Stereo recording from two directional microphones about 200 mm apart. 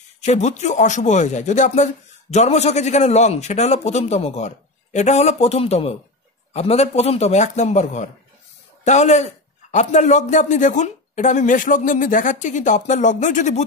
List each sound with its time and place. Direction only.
0.2 s a man's voice: 35° left (ahead or behind)